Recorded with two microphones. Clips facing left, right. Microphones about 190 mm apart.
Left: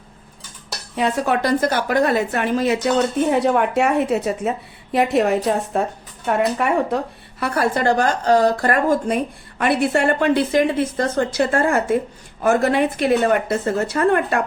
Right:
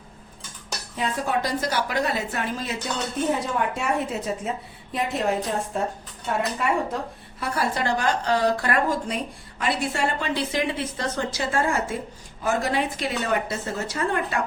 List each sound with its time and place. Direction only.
0.9 s a woman's voice: 75° left (ahead or behind); by 14.4 s 60° left (ahead or behind)